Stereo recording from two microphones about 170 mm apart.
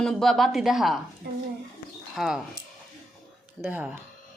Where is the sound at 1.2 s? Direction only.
75° right (ahead or behind).